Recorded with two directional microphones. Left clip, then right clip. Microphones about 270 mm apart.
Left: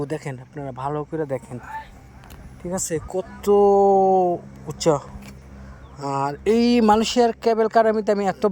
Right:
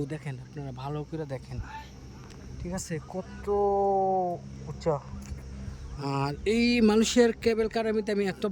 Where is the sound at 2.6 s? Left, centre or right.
Left.